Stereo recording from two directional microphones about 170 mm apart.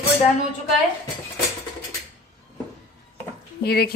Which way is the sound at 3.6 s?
65° left (ahead or behind).